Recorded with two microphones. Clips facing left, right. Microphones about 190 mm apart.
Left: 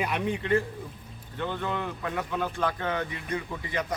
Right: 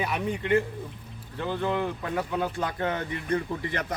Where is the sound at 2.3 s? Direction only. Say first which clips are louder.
Left 1 dB; 15° right (ahead or behind).